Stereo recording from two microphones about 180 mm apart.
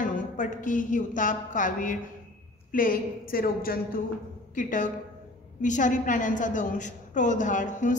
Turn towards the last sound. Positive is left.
turn(degrees=45)  # may be behind; listen again after turning